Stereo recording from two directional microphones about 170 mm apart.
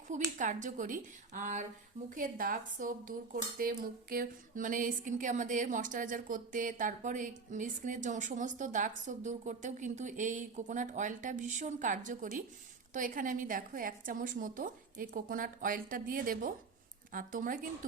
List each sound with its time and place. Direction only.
0.3 s speech: 50° right (ahead or behind)